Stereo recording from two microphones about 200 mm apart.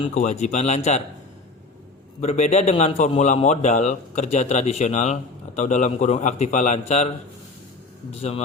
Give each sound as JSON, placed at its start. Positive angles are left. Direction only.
{"t": 0.1, "sound": "a man's voice", "side_deg": 35}
{"t": 2.2, "sound": "a man's voice", "side_deg": 35}
{"t": 8.1, "sound": "a man's voice", "side_deg": 30}